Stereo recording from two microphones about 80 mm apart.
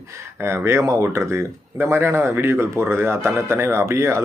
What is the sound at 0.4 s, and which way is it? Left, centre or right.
Speech, right.